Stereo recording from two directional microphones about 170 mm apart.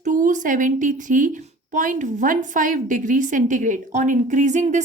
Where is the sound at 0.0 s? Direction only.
50° right (ahead or behind).